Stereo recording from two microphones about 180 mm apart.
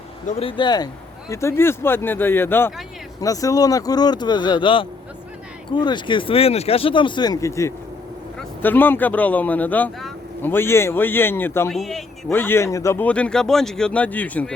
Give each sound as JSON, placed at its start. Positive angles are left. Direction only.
{"t": 0.3, "sound": "speech", "side_deg": 30}
{"t": 11.7, "sound": "a man's voice", "side_deg": 0}
{"t": 12.3, "sound": "speech", "side_deg": 10}